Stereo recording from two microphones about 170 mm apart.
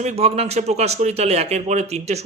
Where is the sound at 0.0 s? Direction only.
40° right (ahead or behind).